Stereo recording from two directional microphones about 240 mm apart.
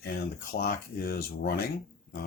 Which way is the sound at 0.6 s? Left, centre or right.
Left.